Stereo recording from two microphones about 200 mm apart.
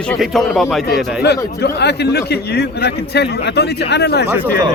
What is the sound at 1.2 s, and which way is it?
A man's voice, 55° left (ahead or behind).